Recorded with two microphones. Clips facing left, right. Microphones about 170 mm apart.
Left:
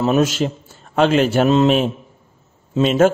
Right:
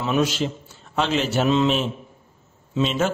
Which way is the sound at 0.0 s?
45° left (ahead or behind).